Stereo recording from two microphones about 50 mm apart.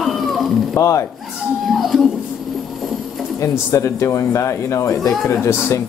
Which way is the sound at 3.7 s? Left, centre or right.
Left.